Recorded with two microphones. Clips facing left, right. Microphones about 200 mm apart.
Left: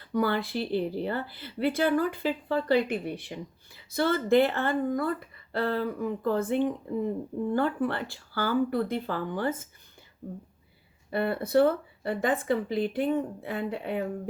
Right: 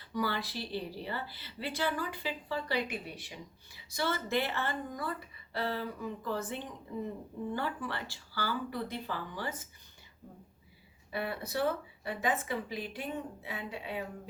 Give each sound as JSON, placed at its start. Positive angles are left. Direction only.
{"t": 0.1, "sound": "a woman's voice", "side_deg": 55}
{"t": 11.1, "sound": "a woman's voice", "side_deg": 55}